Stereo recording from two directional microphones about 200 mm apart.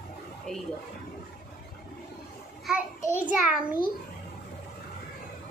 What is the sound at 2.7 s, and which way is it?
Speech, 5° right (ahead or behind).